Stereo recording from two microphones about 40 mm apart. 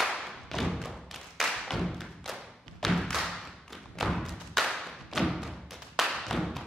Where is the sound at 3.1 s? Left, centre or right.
Centre.